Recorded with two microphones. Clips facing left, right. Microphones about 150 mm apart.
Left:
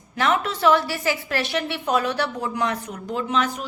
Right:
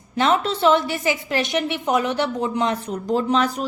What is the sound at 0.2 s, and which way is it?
A woman's voice, 25° right (ahead or behind).